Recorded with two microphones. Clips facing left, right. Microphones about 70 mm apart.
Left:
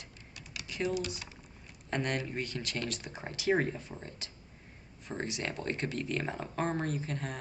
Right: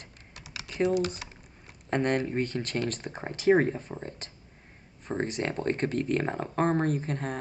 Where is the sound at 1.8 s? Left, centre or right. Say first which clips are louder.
Right 7 dB; right.